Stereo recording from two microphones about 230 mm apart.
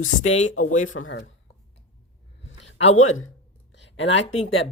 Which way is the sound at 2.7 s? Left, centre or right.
Left.